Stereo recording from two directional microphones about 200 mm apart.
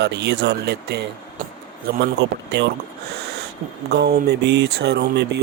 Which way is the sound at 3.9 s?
55° right (ahead or behind).